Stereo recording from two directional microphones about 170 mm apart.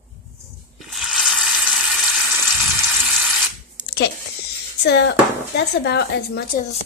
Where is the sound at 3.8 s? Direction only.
80° left.